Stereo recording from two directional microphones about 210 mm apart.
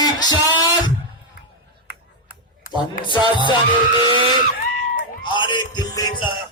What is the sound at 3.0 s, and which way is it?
Speech, 25° left (ahead or behind).